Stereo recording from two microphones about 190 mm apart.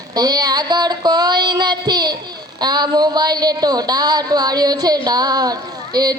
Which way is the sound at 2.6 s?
20° right (ahead or behind).